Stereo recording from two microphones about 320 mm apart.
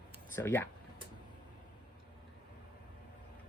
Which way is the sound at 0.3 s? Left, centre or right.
Centre.